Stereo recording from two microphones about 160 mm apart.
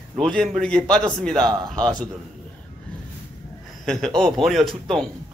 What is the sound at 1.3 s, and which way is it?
Speech, 25° right (ahead or behind).